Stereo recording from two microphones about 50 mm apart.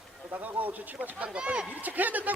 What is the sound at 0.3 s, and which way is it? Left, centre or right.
Speech, right.